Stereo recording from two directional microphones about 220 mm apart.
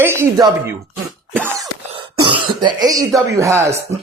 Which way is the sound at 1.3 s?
10° right (ahead or behind).